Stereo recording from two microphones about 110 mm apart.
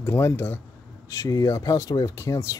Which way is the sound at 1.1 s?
30° left (ahead or behind).